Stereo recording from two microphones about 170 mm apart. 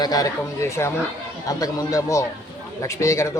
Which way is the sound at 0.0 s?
20° left (ahead or behind).